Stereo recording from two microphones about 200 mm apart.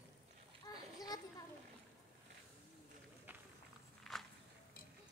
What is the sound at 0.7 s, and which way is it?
Splash, 20° left (ahead or behind).